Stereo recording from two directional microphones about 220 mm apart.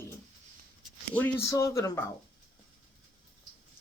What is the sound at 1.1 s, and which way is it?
Speech, 10° left (ahead or behind).